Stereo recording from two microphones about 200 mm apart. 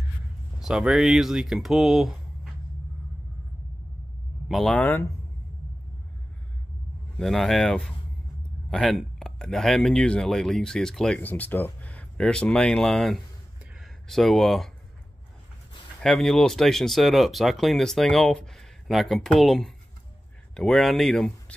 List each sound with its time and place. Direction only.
0.6 s speech: centre (ahead or behind)
4.5 s speech: centre (ahead or behind)
7.2 s speech: centre (ahead or behind)
16.0 s speech: centre (ahead or behind)